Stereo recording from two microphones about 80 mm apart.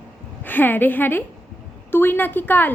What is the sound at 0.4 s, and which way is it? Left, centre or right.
A woman's voice, left.